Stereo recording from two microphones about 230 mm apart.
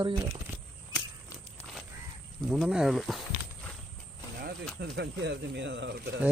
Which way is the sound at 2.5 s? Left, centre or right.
Centre.